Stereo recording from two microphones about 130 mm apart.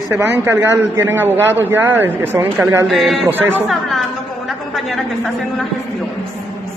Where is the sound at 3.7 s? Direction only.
Centre (ahead or behind).